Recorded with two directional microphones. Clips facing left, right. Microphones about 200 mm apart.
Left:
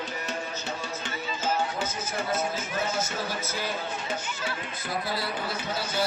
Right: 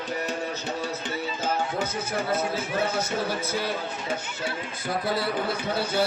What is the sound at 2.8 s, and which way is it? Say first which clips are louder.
Speech: right 3 dB; 60° right (ahead or behind).